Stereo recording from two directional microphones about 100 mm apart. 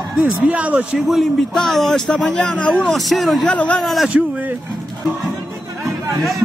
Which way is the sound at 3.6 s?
15° left (ahead or behind).